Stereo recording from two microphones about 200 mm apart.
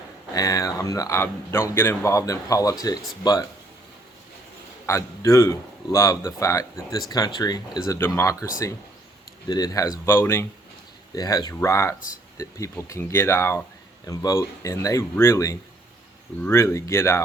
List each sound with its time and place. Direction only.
0.3 s speech: 15° left (ahead or behind)
4.9 s speech: 15° left (ahead or behind)
9.5 s speech: 15° left (ahead or behind)